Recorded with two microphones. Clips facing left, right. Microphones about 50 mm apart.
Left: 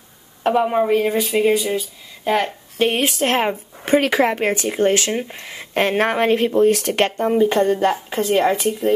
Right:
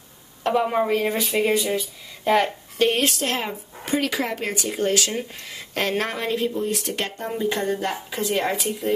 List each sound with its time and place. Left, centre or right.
0.5 s speech: centre
2.8 s a woman's voice: centre
3.2 s speech: left
6.5 s speech: left